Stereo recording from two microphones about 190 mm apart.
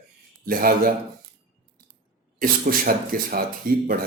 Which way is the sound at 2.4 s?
50° right (ahead or behind).